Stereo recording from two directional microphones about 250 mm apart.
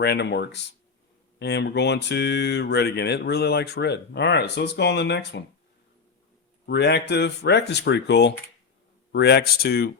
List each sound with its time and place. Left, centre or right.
0.0 s speech: left
6.7 s speech: left